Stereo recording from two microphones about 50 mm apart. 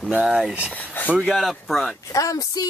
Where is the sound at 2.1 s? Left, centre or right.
Left.